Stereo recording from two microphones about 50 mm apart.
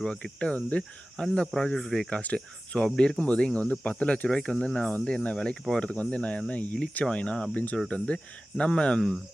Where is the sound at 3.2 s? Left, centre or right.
Left.